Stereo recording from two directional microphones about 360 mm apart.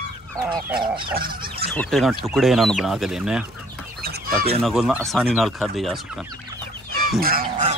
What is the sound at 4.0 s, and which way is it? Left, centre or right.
Chicken, right.